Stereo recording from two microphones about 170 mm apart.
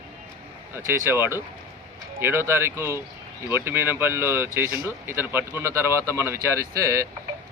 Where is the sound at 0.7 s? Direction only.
15° right (ahead or behind).